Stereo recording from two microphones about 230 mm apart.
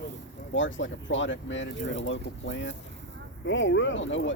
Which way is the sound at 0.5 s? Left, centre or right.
Left.